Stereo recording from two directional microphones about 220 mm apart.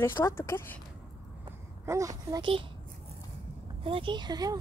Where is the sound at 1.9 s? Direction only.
15° right (ahead or behind).